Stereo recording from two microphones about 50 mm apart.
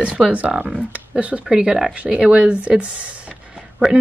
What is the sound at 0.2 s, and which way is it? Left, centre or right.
Speech, centre.